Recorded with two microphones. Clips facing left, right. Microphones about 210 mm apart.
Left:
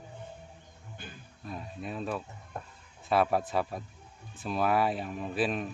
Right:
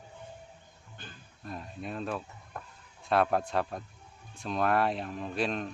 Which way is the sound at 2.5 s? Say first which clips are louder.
Left 2 dB; 25° left (ahead or behind).